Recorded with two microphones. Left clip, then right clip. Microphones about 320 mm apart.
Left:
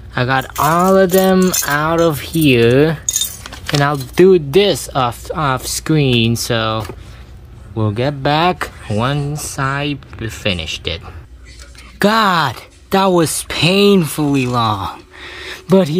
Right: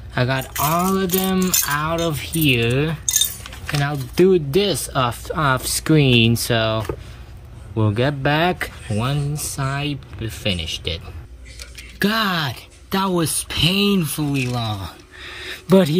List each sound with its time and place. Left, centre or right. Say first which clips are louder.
0.1 s speech: left 6 dB; centre
0.6 s speech: left 9 dB; centre
3.4 s keys jangling: left 8 dB; centre
3.9 s speech: left 5 dB; centre
12.0 s speech: left 8 dB; centre